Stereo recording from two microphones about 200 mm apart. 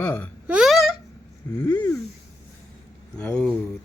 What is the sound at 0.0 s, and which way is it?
Speech, 10° left (ahead or behind).